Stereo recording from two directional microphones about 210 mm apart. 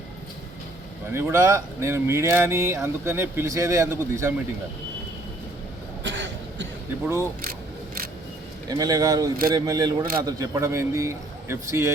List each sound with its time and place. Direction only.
1.1 s speech: 15° right (ahead or behind)
6.0 s cough: 60° right (ahead or behind)
7.0 s speech: 10° right (ahead or behind)
8.7 s speech: 15° right (ahead or behind)